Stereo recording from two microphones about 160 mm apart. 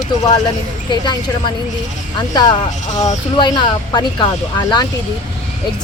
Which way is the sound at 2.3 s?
25° left (ahead or behind).